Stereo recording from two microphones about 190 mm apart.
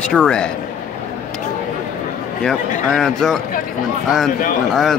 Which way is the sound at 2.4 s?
Centre (ahead or behind).